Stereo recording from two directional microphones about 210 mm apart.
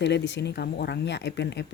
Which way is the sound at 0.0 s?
55° left (ahead or behind).